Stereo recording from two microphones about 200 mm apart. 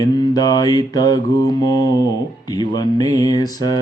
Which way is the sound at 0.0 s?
20° left (ahead or behind).